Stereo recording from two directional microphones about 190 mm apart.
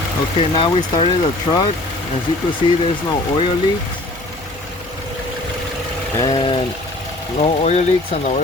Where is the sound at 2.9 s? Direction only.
25° left (ahead or behind).